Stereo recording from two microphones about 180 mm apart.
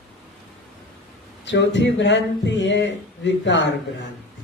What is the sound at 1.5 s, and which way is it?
Speech, 85° left.